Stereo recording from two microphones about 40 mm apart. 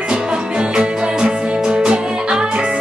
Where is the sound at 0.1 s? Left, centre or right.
Right.